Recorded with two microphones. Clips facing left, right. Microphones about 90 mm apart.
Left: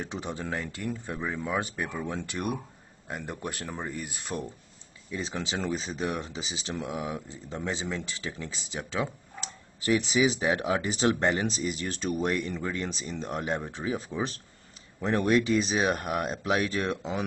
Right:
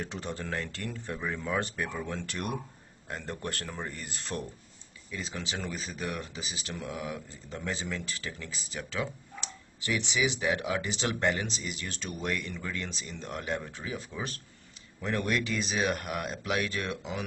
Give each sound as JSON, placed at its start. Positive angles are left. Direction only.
{"t": 0.0, "sound": "speech", "side_deg": 15}
{"t": 5.1, "sound": "speech", "side_deg": 30}
{"t": 9.8, "sound": "speech", "side_deg": 40}